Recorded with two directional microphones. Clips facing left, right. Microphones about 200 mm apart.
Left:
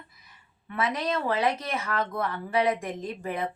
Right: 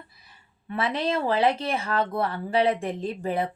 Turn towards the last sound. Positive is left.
turn(degrees=-30)  # may be behind; listen again after turning